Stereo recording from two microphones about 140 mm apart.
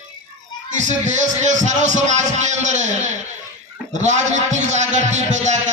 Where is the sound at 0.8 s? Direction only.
60° right (ahead or behind).